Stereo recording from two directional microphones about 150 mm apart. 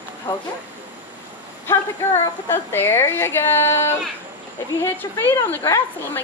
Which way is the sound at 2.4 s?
15° left (ahead or behind).